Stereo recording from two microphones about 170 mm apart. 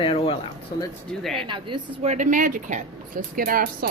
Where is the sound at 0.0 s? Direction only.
30° left (ahead or behind).